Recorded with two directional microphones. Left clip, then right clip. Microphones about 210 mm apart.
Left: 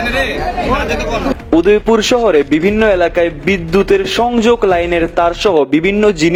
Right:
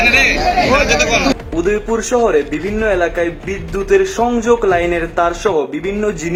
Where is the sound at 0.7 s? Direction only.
45° left (ahead or behind).